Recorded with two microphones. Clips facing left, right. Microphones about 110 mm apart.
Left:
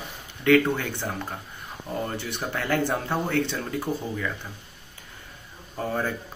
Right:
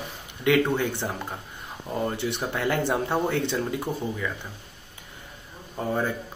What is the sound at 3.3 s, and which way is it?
Speech, 25° right (ahead or behind).